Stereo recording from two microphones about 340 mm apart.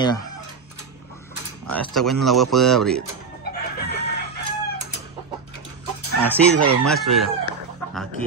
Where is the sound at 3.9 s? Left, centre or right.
Left.